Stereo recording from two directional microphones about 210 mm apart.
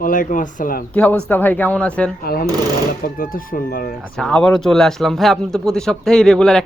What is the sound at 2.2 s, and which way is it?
Speech, 45° left (ahead or behind).